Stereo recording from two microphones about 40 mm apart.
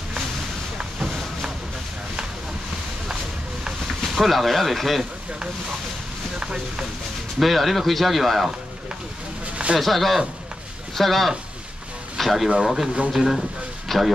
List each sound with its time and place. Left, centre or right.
4.1 s speech: centre
6.4 s speech: centre
7.3 s speech: centre
9.8 s speech: centre